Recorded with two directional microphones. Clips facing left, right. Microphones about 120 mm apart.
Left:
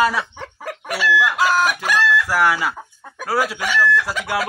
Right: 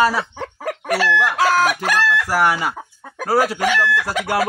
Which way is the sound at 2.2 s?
25° right (ahead or behind).